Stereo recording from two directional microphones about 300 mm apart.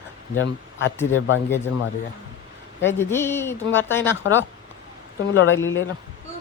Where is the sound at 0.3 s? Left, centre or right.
Left.